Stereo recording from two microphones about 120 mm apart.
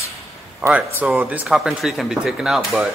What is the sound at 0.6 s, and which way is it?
Speech, 10° right (ahead or behind).